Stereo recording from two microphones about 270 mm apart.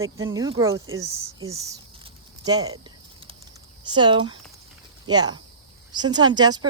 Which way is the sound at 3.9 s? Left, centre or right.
Centre.